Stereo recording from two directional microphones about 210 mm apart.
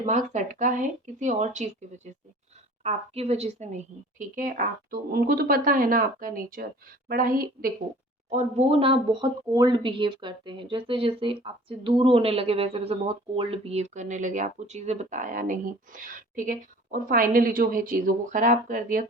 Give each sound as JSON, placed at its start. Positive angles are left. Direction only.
{"t": 0.0, "sound": "a woman's voice", "side_deg": -35}
{"t": 8.3, "sound": "speech", "side_deg": -30}